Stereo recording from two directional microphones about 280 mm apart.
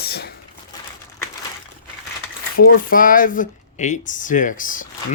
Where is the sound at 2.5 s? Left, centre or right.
Left.